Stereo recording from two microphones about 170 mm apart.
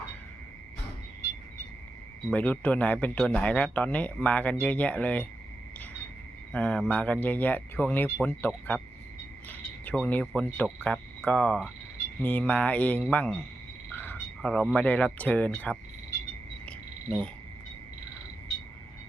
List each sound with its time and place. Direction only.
2.3 s speech: 10° left (ahead or behind)
6.5 s speech: 5° left (ahead or behind)
13.9 s a sound: 10° left (ahead or behind)
14.8 s speech: 10° left (ahead or behind)